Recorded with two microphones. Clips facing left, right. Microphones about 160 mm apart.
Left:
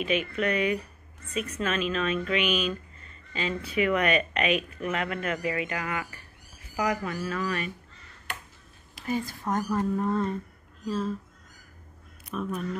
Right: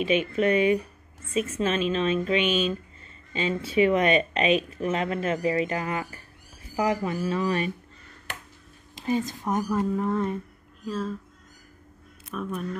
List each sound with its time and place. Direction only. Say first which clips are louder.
0.0 s speech: right 4 dB; 30° right (ahead or behind)
8.9 s speech: right 4 dB; 20° right (ahead or behind); by 11.1 s centre (ahead or behind)
12.3 s speech: even; centre (ahead or behind)